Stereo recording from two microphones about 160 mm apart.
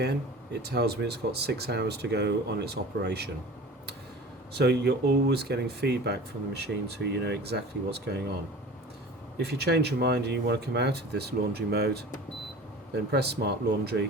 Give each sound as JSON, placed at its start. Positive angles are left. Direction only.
{"t": 0.0, "sound": "speech", "side_deg": -90}
{"t": 4.5, "sound": "speech", "side_deg": -90}
{"t": 9.4, "sound": "speech", "side_deg": -90}
{"t": 13.1, "sound": "speech", "side_deg": -90}